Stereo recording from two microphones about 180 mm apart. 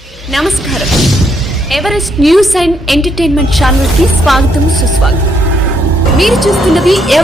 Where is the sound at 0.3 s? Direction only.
Centre (ahead or behind).